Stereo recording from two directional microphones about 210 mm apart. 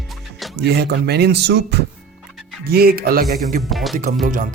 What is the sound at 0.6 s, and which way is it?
Speech, 50° right (ahead or behind).